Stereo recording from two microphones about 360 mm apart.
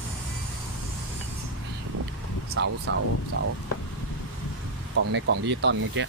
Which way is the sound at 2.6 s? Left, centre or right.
Right.